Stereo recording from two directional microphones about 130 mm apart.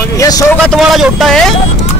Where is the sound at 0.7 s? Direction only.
Centre (ahead or behind).